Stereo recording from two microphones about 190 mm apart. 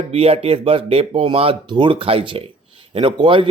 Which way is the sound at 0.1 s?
30° right (ahead or behind).